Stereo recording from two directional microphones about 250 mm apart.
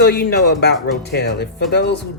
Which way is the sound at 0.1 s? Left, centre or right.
Left.